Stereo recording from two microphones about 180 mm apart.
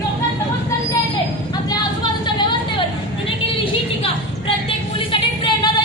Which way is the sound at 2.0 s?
25° left (ahead or behind).